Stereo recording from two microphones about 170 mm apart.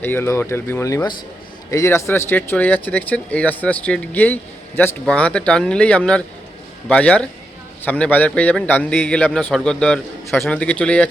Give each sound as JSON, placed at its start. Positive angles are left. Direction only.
{"t": 0.0, "sound": "speech", "side_deg": 15}